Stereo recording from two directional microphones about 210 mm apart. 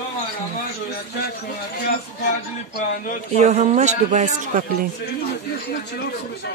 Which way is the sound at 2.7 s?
40° left (ahead or behind).